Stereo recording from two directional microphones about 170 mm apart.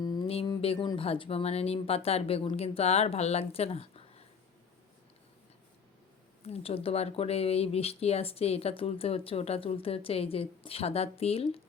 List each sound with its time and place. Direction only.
0.0 s a sound: 25° left (ahead or behind)
0.9 s speech: 30° left (ahead or behind)
6.5 s speech: 35° left (ahead or behind)